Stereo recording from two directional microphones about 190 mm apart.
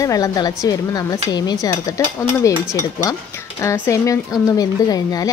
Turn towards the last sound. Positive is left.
turn(degrees=20)  # may be behind; listen again after turning